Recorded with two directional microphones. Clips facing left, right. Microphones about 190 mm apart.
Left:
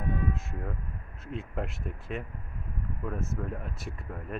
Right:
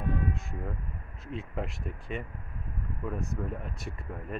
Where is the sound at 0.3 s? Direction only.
Centre (ahead or behind).